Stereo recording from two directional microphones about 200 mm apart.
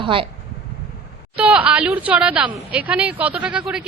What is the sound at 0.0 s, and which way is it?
Speech, 25° right (ahead or behind).